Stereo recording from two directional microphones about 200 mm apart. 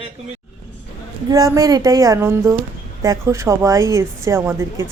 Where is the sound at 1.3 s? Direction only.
15° right (ahead or behind).